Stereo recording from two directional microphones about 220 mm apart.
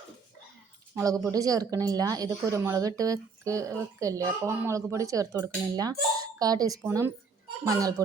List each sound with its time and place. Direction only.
0.9 s speech: 15° right (ahead or behind)